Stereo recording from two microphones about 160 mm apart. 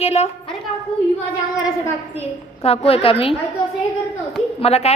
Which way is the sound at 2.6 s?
40° left (ahead or behind).